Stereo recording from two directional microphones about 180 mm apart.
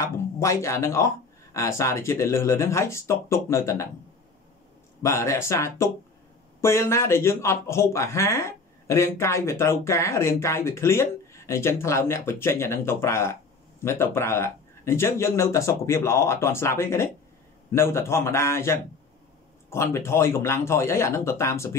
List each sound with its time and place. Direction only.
0.0 s speech: 15° left (ahead or behind)
5.0 s speech: 15° left (ahead or behind)